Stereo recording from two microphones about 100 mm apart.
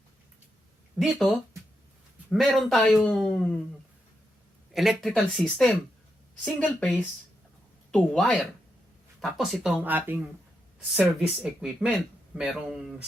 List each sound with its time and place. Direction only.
0.9 s a woman's voice: centre (ahead or behind)
4.7 s a woman's voice: centre (ahead or behind)
9.2 s speech: centre (ahead or behind)
9.8 s speech: 20° right (ahead or behind)